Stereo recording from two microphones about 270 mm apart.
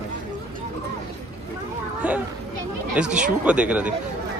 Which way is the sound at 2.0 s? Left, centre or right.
Centre.